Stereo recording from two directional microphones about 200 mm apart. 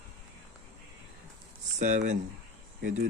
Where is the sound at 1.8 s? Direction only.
40° right (ahead or behind).